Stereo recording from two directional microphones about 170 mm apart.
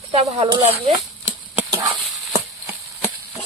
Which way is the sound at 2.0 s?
5° right (ahead or behind).